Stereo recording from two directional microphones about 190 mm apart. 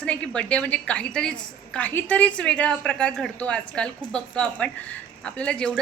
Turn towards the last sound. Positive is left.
turn(degrees=5)  # may be behind; listen again after turning